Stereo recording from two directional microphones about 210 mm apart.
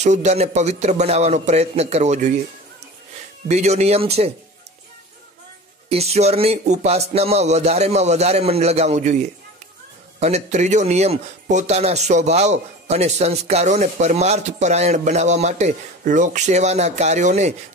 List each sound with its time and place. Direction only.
0.0 s speech: 35° right (ahead or behind)
3.4 s speech: 30° right (ahead or behind)
5.9 s speech: 30° right (ahead or behind)